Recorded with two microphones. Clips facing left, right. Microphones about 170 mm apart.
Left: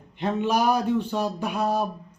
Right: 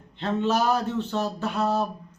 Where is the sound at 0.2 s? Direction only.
15° left (ahead or behind).